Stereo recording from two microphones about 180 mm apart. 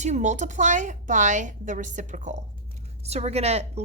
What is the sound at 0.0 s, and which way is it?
A woman's voice, 40° right (ahead or behind).